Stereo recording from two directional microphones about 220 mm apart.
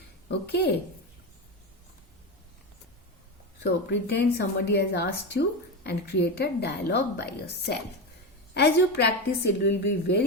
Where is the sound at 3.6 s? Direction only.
50° left (ahead or behind).